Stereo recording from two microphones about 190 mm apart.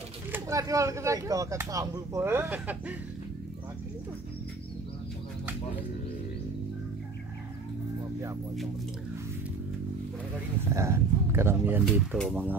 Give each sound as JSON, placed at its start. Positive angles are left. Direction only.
{"t": 0.3, "sound": "speech", "side_deg": -15}
{"t": 10.7, "sound": "speech", "side_deg": -15}